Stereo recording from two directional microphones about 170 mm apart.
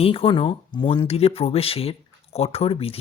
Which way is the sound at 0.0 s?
35° left (ahead or behind).